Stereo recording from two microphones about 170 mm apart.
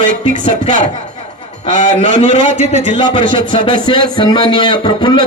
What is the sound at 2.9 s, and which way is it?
A man's voice, 30° left (ahead or behind).